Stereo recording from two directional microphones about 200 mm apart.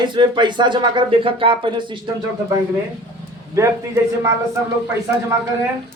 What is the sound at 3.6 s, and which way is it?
Speech, 15° right (ahead or behind).